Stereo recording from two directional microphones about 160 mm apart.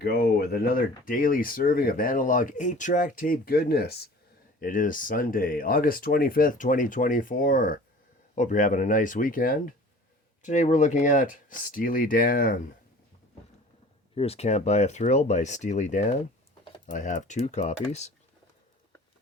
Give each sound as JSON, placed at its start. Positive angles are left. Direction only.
{"t": 0.0, "sound": "speech", "side_deg": 75}
{"t": 4.6, "sound": "speech", "side_deg": 55}
{"t": 10.4, "sound": "speech", "side_deg": 50}
{"t": 14.2, "sound": "speech", "side_deg": 40}